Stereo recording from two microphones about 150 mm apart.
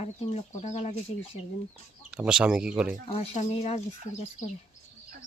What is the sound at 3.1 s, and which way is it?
Speech, 45° left (ahead or behind).